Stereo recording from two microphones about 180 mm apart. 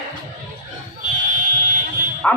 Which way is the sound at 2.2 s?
10° left (ahead or behind).